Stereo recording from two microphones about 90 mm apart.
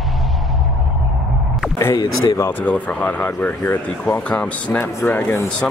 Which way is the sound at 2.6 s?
20° left (ahead or behind).